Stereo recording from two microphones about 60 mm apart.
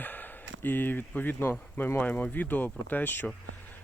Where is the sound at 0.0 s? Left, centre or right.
Left.